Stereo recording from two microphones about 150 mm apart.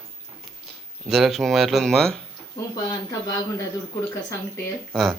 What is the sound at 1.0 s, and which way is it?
Speech, centre (ahead or behind).